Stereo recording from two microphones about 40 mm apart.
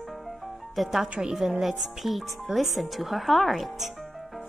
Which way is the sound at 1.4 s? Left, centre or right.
Centre.